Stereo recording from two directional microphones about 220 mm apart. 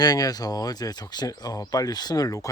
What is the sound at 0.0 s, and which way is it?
Speech, 15° left (ahead or behind).